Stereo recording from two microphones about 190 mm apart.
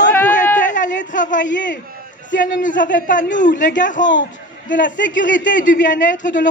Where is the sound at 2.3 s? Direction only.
45° left (ahead or behind).